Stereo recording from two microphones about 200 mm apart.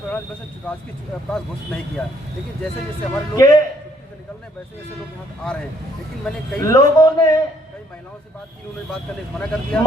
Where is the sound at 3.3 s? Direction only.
20° left (ahead or behind).